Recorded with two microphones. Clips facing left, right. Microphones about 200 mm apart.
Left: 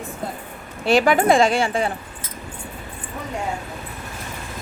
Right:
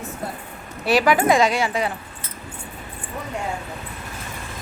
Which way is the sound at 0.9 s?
25° left (ahead or behind).